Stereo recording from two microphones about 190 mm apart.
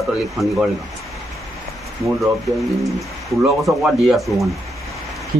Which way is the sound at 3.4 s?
Centre (ahead or behind).